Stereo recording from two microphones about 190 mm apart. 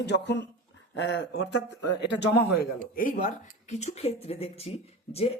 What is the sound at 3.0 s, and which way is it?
Speech, 45° left (ahead or behind).